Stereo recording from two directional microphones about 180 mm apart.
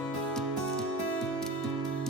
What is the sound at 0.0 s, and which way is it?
Music, 5° left (ahead or behind).